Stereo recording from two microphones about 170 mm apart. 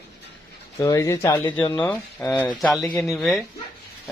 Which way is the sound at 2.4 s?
Centre (ahead or behind).